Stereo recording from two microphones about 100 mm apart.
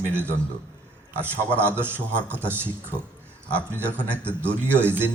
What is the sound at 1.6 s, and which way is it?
A man's voice, 20° right (ahead or behind).